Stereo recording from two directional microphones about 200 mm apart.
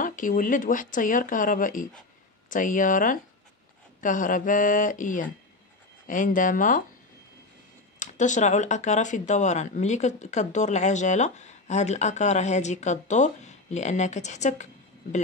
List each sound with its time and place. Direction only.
0.0 s speech: 40° left (ahead or behind)
8.0 s speech: 40° left (ahead or behind)